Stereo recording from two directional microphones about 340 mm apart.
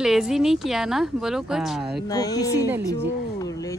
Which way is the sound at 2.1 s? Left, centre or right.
Centre.